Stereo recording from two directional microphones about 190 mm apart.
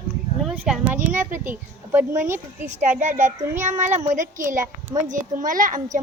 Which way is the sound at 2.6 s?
40° right (ahead or behind).